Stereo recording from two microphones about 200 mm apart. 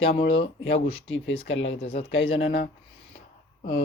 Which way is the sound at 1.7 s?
30° left (ahead or behind).